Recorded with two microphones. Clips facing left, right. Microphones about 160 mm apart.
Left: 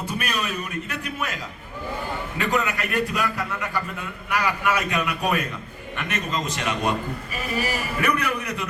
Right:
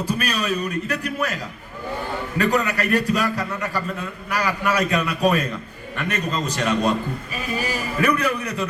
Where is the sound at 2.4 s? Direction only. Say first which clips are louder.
Right 4 dB; 40° right (ahead or behind).